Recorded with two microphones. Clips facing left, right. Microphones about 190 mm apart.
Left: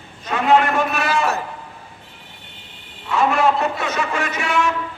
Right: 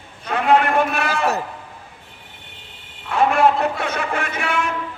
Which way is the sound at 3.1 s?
55° right (ahead or behind).